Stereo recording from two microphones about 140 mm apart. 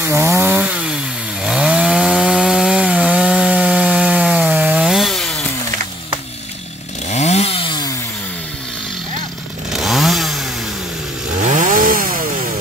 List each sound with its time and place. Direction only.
0.0 s chainsaw: 15° right (ahead or behind); by 5.4 s 5° left (ahead or behind)
7.1 s chainsaw: 55° left (ahead or behind); by 7.9 s 35° left (ahead or behind)
9.7 s chainsaw: centre (ahead or behind)
11.4 s chainsaw: 65° right (ahead or behind); by 12.2 s 80° right